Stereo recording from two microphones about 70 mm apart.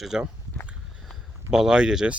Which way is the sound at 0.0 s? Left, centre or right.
Centre.